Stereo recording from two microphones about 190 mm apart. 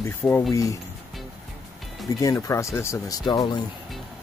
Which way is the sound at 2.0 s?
15° left (ahead or behind).